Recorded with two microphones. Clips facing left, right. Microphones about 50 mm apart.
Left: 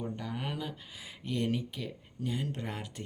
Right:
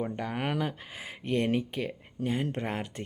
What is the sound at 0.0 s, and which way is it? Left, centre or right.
Speech, right.